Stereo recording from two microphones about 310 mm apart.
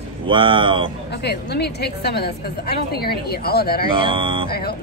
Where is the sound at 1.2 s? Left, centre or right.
Left.